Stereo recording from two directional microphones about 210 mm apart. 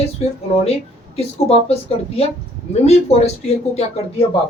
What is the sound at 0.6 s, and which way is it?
Speech, 30° left (ahead or behind).